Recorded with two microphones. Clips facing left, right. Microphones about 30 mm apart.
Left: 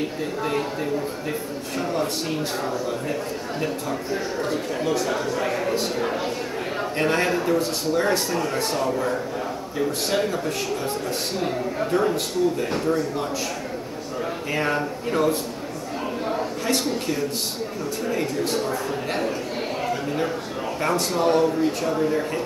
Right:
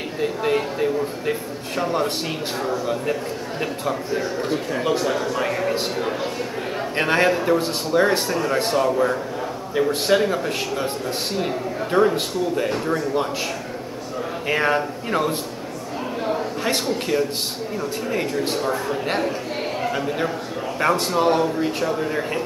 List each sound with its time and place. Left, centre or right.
0.2 s a man's voice: centre
3.5 s a man's voice: right
5.0 s speech: centre
7.0 s a man's voice: right
11.9 s a man's voice: right
14.5 s a man's voice: right
18.1 s a man's voice: right
20.8 s a man's voice: right